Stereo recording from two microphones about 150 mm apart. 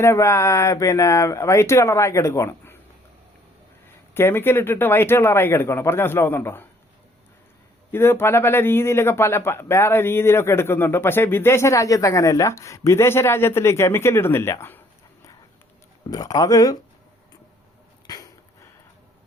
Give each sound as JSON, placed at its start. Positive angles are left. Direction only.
{"t": 0.0, "sound": "speech", "side_deg": 20}
{"t": 4.1, "sound": "a man's voice", "side_deg": 15}
{"t": 7.9, "sound": "a man's voice", "side_deg": 15}
{"t": 16.0, "sound": "speech", "side_deg": 25}
{"t": 18.1, "sound": "a sound", "side_deg": 25}